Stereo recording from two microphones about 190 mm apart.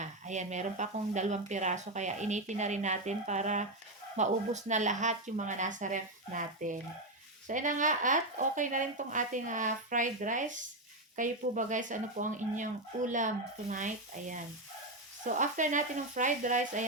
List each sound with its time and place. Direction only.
0.0 s speech: 40° right (ahead or behind)